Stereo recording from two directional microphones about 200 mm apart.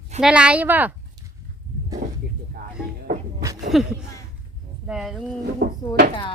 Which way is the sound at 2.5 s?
50° right (ahead or behind).